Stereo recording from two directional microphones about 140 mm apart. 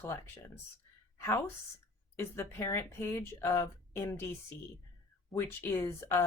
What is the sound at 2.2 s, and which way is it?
Speech, 20° left (ahead or behind).